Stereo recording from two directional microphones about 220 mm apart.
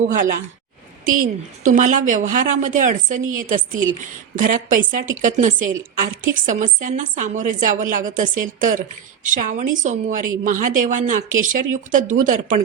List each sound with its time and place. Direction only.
1.1 s a woman's voice: 40° right (ahead or behind)